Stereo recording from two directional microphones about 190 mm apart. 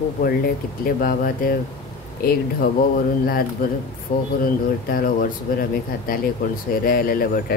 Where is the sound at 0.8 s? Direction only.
50° left (ahead or behind).